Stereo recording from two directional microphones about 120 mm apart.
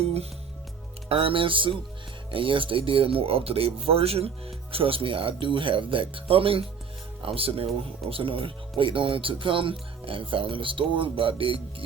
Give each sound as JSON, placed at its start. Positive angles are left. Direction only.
{"t": 1.0, "sound": "speech", "side_deg": -50}